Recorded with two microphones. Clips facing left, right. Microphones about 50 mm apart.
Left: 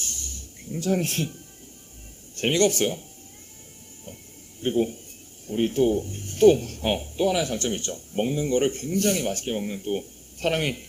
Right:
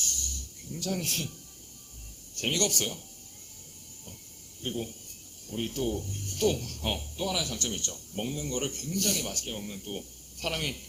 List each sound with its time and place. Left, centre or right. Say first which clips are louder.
0.0 s music: left 1 dB; left
2.3 s speech: left 9 dB; left
4.6 s speech: left 11 dB; left